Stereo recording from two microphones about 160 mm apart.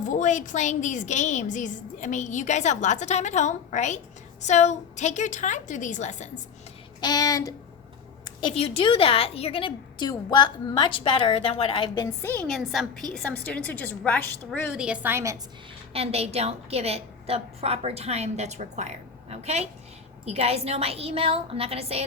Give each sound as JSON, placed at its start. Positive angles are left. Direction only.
{"t": 0.0, "sound": "a woman's voice", "side_deg": 50}
{"t": 7.0, "sound": "speech", "side_deg": 25}
{"t": 8.5, "sound": "a woman's voice", "side_deg": 35}
{"t": 12.0, "sound": "a woman's voice", "side_deg": 15}
{"t": 12.5, "sound": "a woman's voice", "side_deg": 0}
{"t": 14.7, "sound": "a woman's voice", "side_deg": -5}
{"t": 15.9, "sound": "a woman's voice", "side_deg": -40}